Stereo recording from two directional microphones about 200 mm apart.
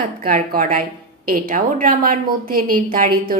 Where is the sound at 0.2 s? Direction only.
45° right (ahead or behind).